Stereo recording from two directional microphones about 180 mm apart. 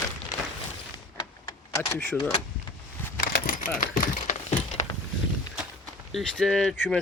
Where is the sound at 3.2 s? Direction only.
55° left (ahead or behind); by 4.9 s 40° left (ahead or behind).